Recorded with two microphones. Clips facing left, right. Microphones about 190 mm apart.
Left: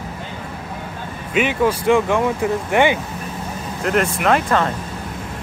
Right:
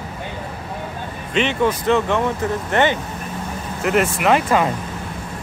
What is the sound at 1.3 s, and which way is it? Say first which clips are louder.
Speech: left 1 dB; 10° left (ahead or behind).